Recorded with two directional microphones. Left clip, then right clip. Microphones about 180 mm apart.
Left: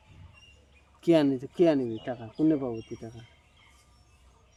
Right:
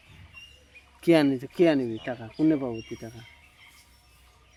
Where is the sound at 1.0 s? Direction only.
20° right (ahead or behind).